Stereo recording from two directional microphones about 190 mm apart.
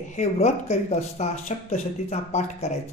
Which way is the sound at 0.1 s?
35° left (ahead or behind).